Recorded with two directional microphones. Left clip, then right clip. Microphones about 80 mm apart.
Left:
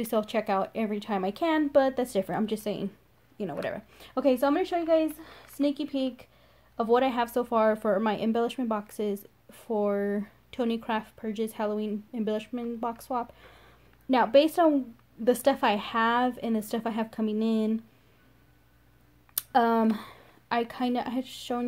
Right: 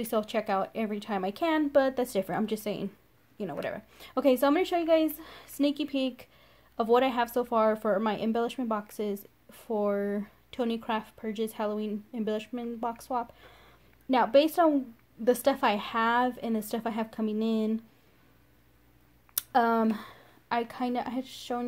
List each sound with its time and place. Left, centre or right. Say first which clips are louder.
0.0 s a woman's voice: left 2 dB; centre
3.6 s a woman's voice: left 2 dB; centre
4.1 s speech: even; right
7.1 s a woman's voice: left 1 dB; centre
19.3 s a woman's voice: left 1 dB; centre